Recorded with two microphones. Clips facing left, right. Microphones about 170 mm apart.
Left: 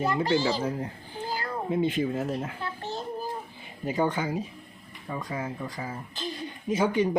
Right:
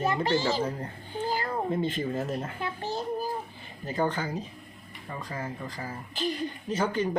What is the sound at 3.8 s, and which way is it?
Speech, 10° left (ahead or behind).